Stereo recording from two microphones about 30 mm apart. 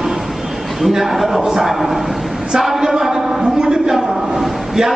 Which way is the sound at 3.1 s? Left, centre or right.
Right.